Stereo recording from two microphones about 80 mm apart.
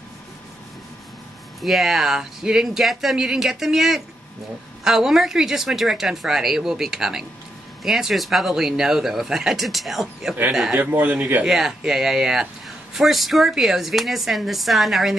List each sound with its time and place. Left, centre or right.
1.6 s speech: centre
10.8 s speech: right
11.4 s speech: centre